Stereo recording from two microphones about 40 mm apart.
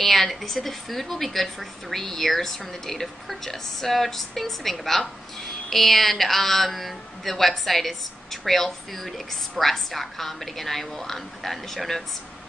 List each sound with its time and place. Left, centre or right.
0.0 s speech: centre